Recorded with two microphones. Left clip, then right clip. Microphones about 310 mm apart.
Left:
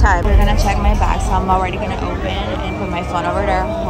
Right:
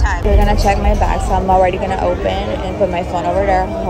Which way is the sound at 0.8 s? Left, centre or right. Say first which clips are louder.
Right 2 dB; left.